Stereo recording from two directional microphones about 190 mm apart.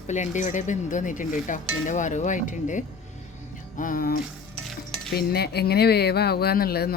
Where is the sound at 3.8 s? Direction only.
45° left (ahead or behind).